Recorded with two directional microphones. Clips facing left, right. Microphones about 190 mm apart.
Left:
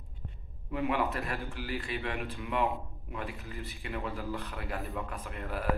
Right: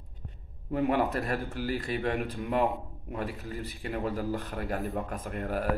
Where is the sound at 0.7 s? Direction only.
40° right (ahead or behind).